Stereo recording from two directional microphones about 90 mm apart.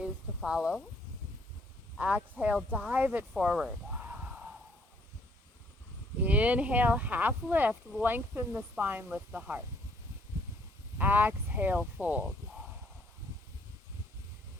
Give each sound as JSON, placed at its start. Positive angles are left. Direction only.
{"t": 0.0, "sound": "a sound", "side_deg": -10}
{"t": 2.0, "sound": "speech", "side_deg": -15}
{"t": 3.4, "sound": "speech", "side_deg": -10}
{"t": 4.0, "sound": "yell", "side_deg": -15}
{"t": 6.2, "sound": "speech", "side_deg": -15}
{"t": 10.9, "sound": "speech", "side_deg": -20}